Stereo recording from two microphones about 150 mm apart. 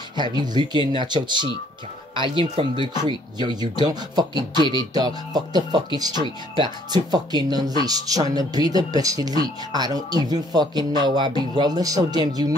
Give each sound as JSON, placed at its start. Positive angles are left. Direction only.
{"t": 0.4, "sound": "speech", "side_deg": -30}